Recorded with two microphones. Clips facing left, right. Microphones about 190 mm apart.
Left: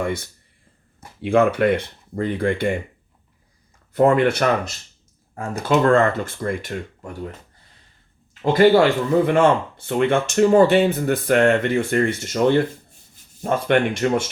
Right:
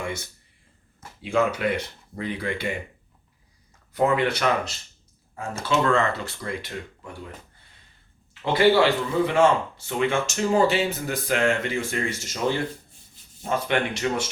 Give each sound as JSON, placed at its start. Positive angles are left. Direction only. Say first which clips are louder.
{"t": 0.0, "sound": "speech", "louder": "left 7 dB", "side_deg": 55}
{"t": 3.9, "sound": "speech", "louder": "left 6 dB", "side_deg": 50}
{"t": 8.3, "sound": "speech", "louder": "left 5 dB", "side_deg": 45}